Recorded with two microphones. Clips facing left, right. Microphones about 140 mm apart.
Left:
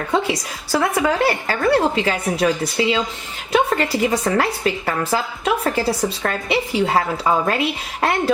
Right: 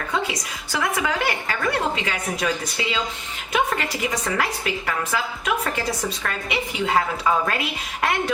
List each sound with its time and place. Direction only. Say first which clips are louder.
0.1 s a woman's voice: left 6 dB; 35° left (ahead or behind)